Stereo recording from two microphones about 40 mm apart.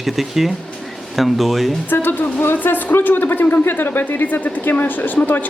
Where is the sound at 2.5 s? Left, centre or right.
Left.